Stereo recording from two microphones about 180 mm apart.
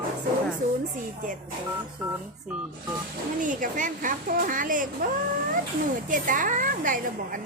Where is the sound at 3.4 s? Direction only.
45° right (ahead or behind).